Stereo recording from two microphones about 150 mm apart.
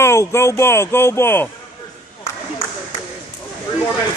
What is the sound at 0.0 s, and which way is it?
Speech, 20° left (ahead or behind).